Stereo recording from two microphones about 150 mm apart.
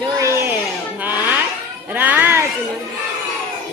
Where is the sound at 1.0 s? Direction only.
10° right (ahead or behind).